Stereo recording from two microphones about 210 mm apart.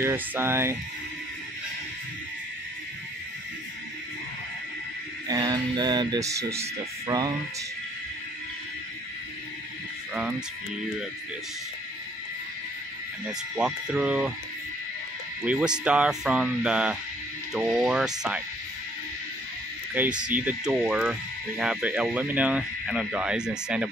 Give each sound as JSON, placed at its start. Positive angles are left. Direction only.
{"t": 0.0, "sound": "speech", "side_deg": -10}
{"t": 5.3, "sound": "speech", "side_deg": -20}
{"t": 13.6, "sound": "speech", "side_deg": -5}
{"t": 15.4, "sound": "speech", "side_deg": -5}
{"t": 19.9, "sound": "speech", "side_deg": -5}